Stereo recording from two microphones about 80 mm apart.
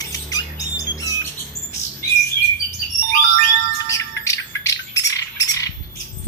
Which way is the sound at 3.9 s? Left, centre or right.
Left.